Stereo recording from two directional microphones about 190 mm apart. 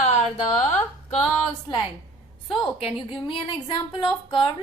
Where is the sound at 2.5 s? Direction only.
30° left (ahead or behind).